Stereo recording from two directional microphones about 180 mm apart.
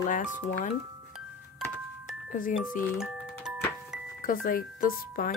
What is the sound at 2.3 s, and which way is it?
Speech, 50° left (ahead or behind).